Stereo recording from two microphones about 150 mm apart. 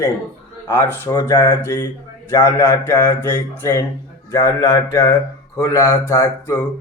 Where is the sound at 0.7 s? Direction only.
15° left (ahead or behind).